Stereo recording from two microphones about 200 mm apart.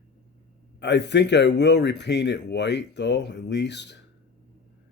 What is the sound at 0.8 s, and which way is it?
Speech, 60° left (ahead or behind).